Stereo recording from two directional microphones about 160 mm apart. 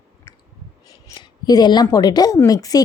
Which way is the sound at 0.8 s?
25° left (ahead or behind).